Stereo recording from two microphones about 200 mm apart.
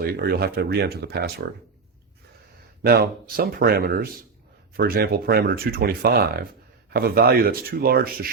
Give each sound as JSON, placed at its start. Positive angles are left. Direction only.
{"t": 0.0, "sound": "speech", "side_deg": -50}
{"t": 2.8, "sound": "speech", "side_deg": -50}